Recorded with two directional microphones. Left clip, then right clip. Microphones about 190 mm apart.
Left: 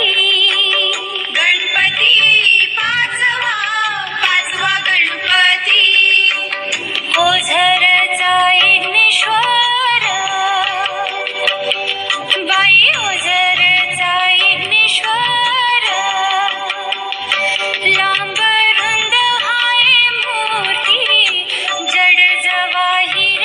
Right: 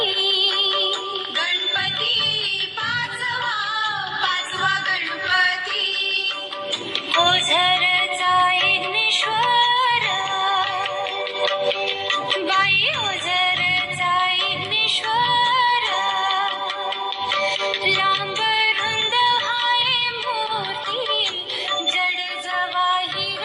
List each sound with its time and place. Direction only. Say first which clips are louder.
0.0 s music: left 8 dB; 30° left (ahead or behind)
7.3 s music: left 5 dB; 5° right (ahead or behind)
12.3 s music: left 9 dB; centre (ahead or behind)
15.1 s music: left 4 dB; 25° left (ahead or behind)
15.4 s music: left 4 dB; centre (ahead or behind)
17.3 s music: left 7 dB; centre (ahead or behind)
20.8 s music: left 12 dB; 30° left (ahead or behind)